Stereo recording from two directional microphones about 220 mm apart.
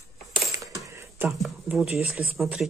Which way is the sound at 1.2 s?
5° right (ahead or behind).